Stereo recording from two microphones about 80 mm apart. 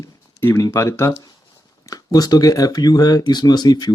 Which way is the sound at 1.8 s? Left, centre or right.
Left.